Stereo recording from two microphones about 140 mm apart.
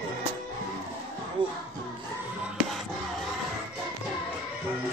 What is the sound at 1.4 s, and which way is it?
Music, 35° right (ahead or behind).